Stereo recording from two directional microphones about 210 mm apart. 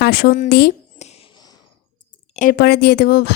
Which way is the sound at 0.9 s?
30° left (ahead or behind).